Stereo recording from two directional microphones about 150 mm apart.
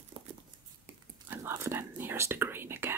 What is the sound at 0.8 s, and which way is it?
Speech, 15° right (ahead or behind).